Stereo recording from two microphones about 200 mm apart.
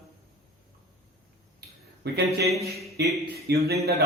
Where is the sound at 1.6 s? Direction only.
55° right (ahead or behind).